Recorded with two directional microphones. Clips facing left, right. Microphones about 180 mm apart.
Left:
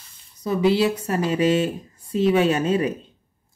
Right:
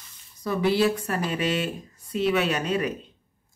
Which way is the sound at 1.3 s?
25° left (ahead or behind).